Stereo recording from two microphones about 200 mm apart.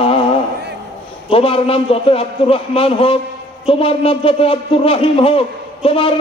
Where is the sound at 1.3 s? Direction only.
30° left (ahead or behind).